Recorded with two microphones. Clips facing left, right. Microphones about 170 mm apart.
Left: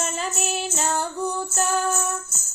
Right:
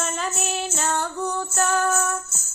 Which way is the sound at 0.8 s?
30° left (ahead or behind).